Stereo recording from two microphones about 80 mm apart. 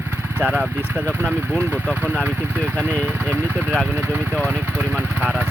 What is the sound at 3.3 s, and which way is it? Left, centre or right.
Speech, right.